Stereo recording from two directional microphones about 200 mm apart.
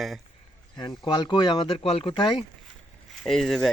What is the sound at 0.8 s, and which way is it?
Speech, 20° left (ahead or behind).